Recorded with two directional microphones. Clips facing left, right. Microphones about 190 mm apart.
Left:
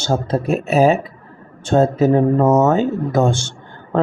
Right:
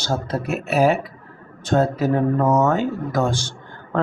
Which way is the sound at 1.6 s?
25° left (ahead or behind).